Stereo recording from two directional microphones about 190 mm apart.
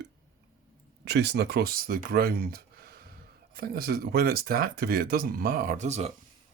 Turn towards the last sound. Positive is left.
turn(degrees=-35)  # may be behind; listen again after turning